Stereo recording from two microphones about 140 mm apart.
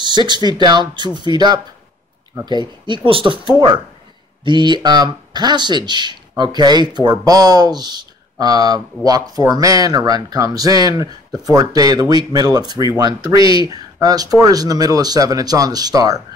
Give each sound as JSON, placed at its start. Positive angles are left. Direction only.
{"t": 0.5, "sound": "speech", "side_deg": -30}